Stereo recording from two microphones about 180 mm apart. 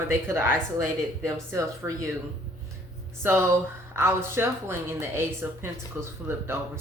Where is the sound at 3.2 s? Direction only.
15° right (ahead or behind).